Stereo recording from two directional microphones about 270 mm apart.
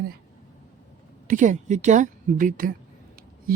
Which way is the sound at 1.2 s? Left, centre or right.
Right.